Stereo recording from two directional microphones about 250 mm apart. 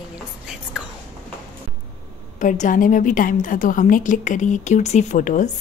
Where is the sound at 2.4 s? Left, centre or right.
Left.